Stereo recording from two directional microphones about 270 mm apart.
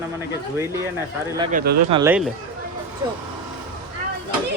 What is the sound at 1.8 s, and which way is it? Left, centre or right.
Speech, centre.